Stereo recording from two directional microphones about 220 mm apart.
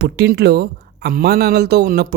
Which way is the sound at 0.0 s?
45° right (ahead or behind).